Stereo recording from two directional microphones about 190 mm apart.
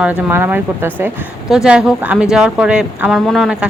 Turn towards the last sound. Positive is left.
turn(degrees=0)  # may be behind; listen again after turning